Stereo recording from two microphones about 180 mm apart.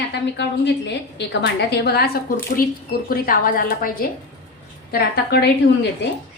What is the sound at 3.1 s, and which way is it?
A woman's voice, 50° left (ahead or behind).